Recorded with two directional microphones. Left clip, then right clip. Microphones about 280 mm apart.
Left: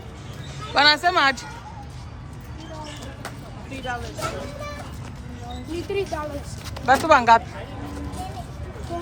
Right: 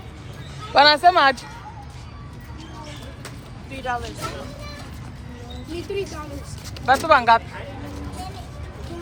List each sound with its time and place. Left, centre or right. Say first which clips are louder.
0.7 s speech: right 4 dB; centre
3.7 s a sound: right 4 dB; right
5.9 s speech: left 2 dB; left
6.8 s speech: even; centre